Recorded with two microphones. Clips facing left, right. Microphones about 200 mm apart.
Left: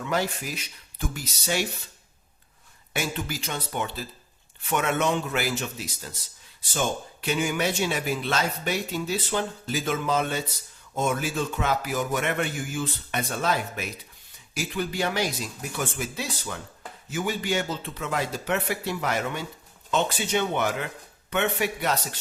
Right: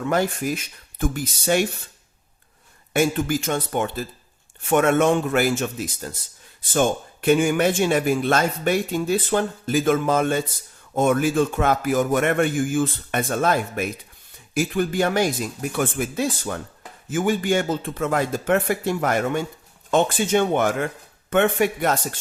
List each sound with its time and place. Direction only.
0.0 s speech: 50° right (ahead or behind)
2.9 s speech: 50° right (ahead or behind)